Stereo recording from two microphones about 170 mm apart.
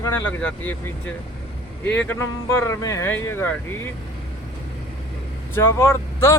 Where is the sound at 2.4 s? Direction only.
15° left (ahead or behind).